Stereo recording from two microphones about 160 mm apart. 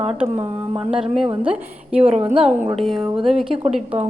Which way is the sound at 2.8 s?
Centre (ahead or behind).